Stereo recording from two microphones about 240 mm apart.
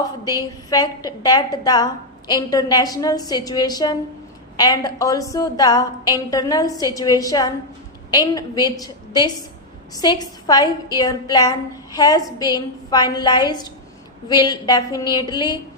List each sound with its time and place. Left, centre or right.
0.3 s a woman's voice: centre